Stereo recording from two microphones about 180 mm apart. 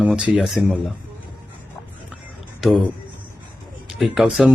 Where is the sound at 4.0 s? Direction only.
Centre (ahead or behind).